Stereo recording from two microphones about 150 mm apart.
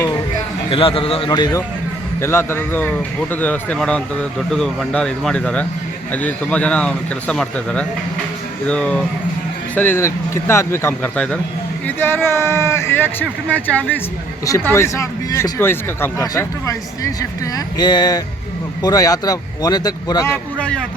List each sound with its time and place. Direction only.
0.7 s a man's voice: 35° left (ahead or behind)
1.3 s speech: 25° left (ahead or behind)
2.2 s a man's voice: 15° left (ahead or behind)
20.3 s a man's voice: 10° left (ahead or behind)